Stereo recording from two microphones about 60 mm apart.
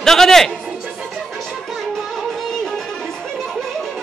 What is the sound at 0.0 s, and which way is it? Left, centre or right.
Music, centre.